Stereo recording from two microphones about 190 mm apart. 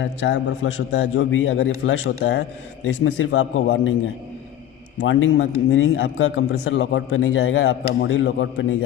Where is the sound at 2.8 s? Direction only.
90° left.